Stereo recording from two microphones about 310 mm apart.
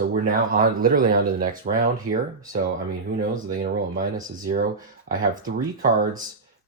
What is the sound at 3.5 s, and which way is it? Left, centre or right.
Speech, right.